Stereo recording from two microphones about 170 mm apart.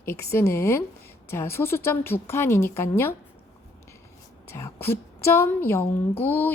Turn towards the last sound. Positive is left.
turn(degrees=10)  # may be behind; listen again after turning